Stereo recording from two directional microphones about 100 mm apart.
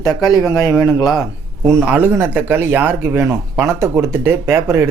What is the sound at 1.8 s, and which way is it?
Speech, 20° right (ahead or behind).